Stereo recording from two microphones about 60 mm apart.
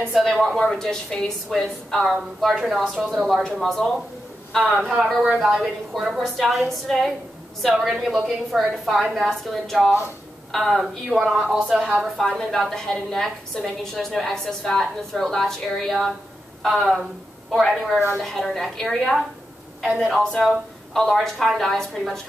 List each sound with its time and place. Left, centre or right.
0.1 s a woman's voice: centre
3.1 s a woman's voice: centre
4.9 s a woman's voice: centre
12.4 s a woman's voice: centre
19.9 s speech: centre
20.4 s a woman's voice: centre